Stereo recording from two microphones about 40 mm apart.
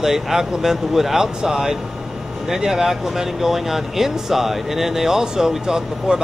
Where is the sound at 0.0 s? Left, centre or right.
Centre.